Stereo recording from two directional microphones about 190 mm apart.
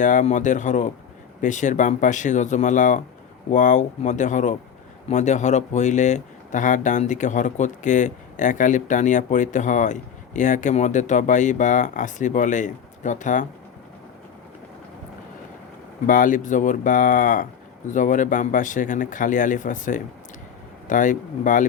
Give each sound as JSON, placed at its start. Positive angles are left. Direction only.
{"t": 0.0, "sound": "speech", "side_deg": 40}
{"t": 16.0, "sound": "speech", "side_deg": 45}